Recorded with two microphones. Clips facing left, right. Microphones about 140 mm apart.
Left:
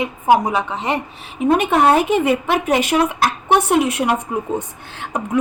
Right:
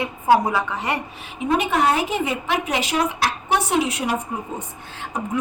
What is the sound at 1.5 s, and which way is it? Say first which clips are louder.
A woman's voice: left 5 dB; 55° left (ahead or behind).